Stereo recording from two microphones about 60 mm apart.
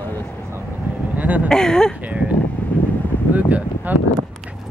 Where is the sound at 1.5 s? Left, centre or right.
Centre.